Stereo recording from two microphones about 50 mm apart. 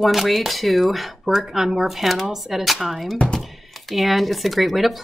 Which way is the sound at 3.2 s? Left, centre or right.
Centre.